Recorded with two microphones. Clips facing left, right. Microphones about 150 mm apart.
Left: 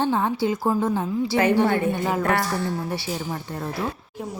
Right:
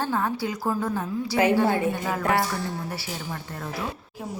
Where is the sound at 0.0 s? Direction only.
25° left (ahead or behind).